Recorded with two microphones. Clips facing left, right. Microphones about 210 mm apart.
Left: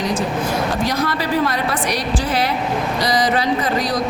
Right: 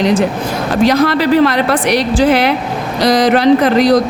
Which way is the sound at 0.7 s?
80° right.